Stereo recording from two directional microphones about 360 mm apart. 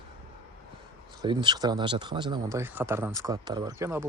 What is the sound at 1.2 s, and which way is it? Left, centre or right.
Speech, centre.